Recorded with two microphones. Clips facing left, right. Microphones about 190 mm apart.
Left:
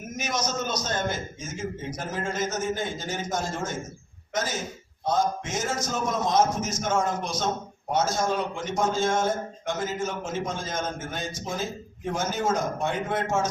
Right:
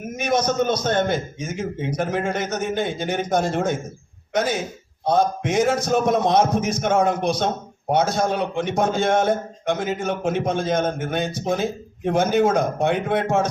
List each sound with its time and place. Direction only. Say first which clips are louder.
0.2 s a man's voice: right 9 dB; 55° right (ahead or behind)